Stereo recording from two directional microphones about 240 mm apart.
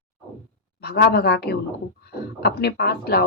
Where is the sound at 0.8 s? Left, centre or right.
Left.